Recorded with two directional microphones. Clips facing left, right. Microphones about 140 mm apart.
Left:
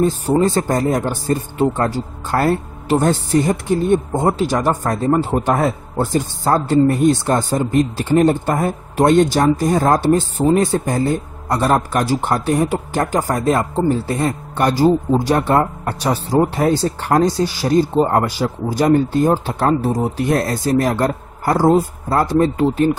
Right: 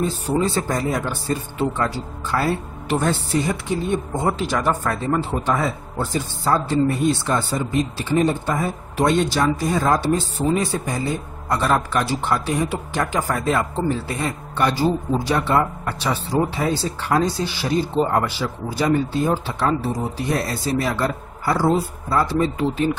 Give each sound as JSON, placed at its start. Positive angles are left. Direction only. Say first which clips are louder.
{"t": 0.0, "sound": "speech", "louder": "left 6 dB", "side_deg": 45}
{"t": 2.9, "sound": "speech", "louder": "left 5 dB", "side_deg": 40}